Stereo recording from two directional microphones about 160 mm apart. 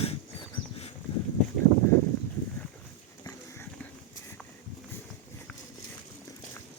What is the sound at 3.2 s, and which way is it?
Dog, 15° left (ahead or behind).